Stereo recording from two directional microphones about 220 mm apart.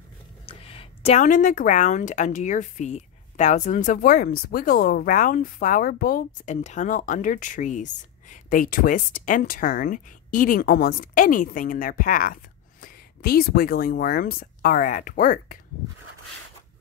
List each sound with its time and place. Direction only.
0.5 s speech: 25° left (ahead or behind)